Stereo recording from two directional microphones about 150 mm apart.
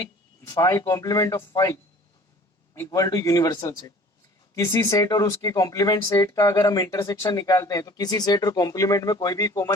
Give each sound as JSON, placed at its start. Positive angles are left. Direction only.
{"t": 0.0, "sound": "speech", "side_deg": 20}